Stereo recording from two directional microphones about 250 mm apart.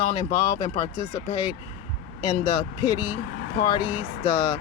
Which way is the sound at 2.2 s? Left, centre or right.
Left.